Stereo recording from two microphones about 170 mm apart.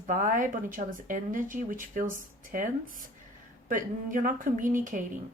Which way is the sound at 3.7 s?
50° right (ahead or behind).